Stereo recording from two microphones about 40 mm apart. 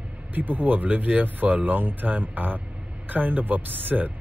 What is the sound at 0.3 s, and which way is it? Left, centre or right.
Speech, right.